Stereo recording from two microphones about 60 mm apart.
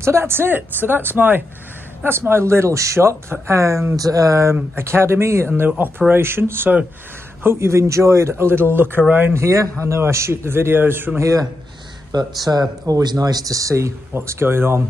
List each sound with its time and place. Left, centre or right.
0.0 s speech: right
3.9 s speech: right
4.7 s speech: right
5.8 s speech: right
7.4 s speech: right
9.0 s speech: centre
9.3 s speech: right
11.1 s a man's voice: right
12.1 s speech: right
14.1 s speech: right